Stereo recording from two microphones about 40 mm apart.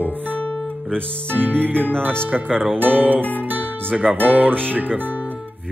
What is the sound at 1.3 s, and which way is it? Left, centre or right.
Music, right.